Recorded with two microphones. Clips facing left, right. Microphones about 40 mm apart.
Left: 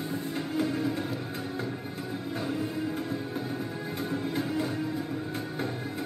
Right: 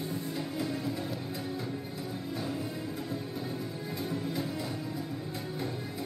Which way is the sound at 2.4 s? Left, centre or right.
Left.